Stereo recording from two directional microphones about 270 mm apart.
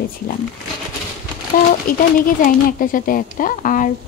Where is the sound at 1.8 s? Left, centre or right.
Left.